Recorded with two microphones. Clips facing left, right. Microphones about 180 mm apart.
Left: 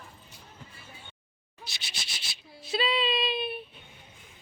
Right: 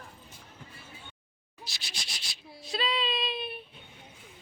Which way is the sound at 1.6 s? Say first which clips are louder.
Even; centre (ahead or behind).